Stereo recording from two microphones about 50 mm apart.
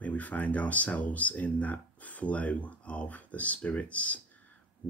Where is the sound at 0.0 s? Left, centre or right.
Left.